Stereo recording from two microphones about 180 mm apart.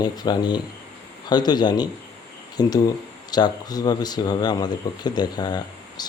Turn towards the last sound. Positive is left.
turn(degrees=20)  # may be behind; listen again after turning